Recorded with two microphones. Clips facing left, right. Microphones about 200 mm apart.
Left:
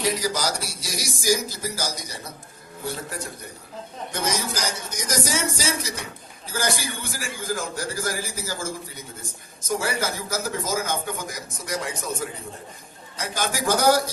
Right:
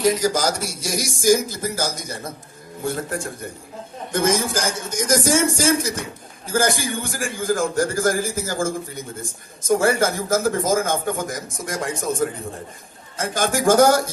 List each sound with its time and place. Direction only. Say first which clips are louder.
0.2 s a man's voice: right 6 dB; 45° right (ahead or behind)